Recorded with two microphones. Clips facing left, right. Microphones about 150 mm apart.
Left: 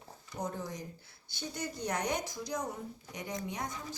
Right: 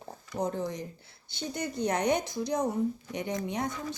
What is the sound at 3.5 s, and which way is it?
Speech, 70° right (ahead or behind).